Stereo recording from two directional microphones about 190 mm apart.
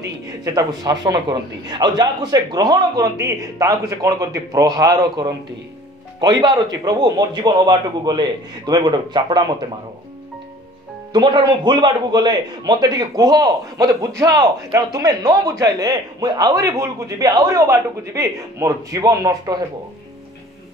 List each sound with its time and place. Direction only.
0.6 s a man's voice: 20° right (ahead or behind)
11.1 s a man's voice: 25° right (ahead or behind)